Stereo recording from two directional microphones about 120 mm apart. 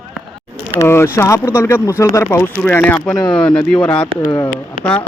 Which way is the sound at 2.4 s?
15° left (ahead or behind).